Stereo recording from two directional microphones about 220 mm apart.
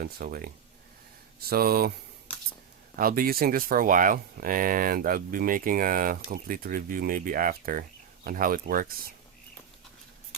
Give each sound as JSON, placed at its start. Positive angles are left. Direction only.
{"t": 0.0, "sound": "speech", "side_deg": -40}
{"t": 2.9, "sound": "speech", "side_deg": -40}